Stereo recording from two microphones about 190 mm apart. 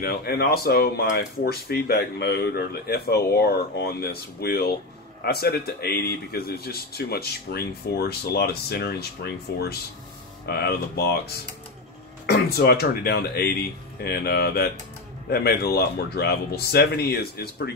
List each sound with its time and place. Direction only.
0.0 s a man's voice: 55° left (ahead or behind)